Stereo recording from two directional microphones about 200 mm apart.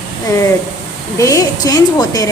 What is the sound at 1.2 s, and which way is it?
A woman's voice, 15° left (ahead or behind).